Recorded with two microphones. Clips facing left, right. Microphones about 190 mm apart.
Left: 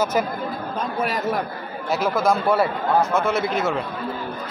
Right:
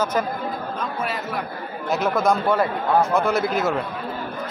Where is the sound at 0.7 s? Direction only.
40° left (ahead or behind).